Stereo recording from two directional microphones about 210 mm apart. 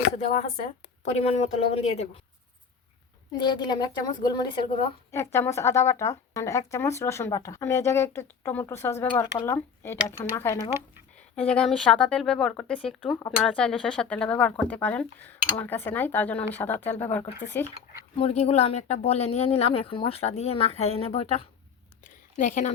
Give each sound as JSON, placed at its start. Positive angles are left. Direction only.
{"t": 0.2, "sound": "a woman's voice", "side_deg": 30}
{"t": 3.3, "sound": "speech", "side_deg": 20}
{"t": 5.1, "sound": "speech", "side_deg": 10}
{"t": 18.2, "sound": "speech", "side_deg": 30}
{"t": 22.0, "sound": "a sound", "side_deg": 35}